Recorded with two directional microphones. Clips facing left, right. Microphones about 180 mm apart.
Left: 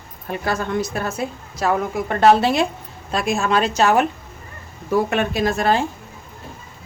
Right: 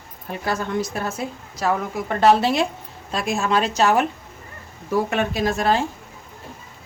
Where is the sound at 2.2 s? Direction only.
55° left (ahead or behind).